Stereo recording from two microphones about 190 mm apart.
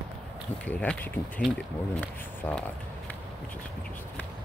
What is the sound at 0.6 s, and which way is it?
Speech, 10° left (ahead or behind).